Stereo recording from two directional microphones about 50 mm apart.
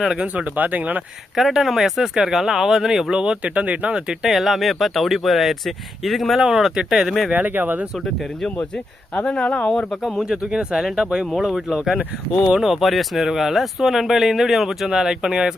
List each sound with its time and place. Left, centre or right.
0.3 s speech: right
1.4 s speech: centre
3.2 s speech: right
4.3 s speech: centre
7.3 s speech: right
7.9 s speech: centre
8.7 s speech: centre
10.2 s speech: centre